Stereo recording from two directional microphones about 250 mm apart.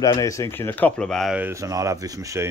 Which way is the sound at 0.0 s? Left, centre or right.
Centre.